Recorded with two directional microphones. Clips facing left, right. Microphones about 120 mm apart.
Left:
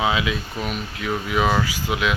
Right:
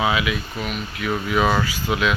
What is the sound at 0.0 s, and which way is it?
Speech, 25° left (ahead or behind).